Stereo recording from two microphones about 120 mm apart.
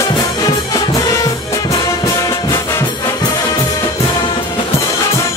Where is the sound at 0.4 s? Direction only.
30° left (ahead or behind).